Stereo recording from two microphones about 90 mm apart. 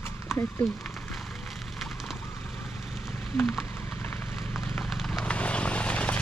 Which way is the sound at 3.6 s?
25° left (ahead or behind).